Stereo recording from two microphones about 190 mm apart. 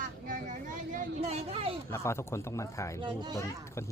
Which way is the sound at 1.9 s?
15° left (ahead or behind).